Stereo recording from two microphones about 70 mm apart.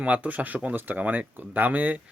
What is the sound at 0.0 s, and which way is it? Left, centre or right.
Speech, right.